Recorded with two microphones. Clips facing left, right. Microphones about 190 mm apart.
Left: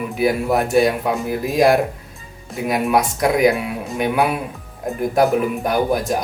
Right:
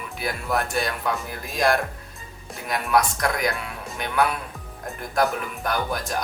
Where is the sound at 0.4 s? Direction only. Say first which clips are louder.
Left 7 dB; 10° left (ahead or behind).